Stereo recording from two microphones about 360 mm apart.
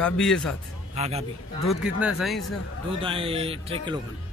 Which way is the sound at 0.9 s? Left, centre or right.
Centre.